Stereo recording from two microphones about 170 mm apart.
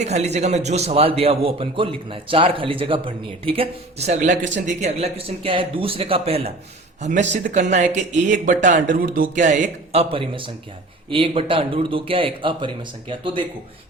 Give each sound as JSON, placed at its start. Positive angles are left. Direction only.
{"t": 0.0, "sound": "a man's voice", "side_deg": -40}